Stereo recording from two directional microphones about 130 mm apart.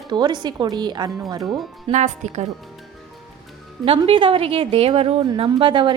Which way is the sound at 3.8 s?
45° right (ahead or behind).